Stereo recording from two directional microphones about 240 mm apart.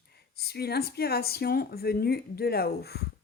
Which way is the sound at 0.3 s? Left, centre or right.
Left.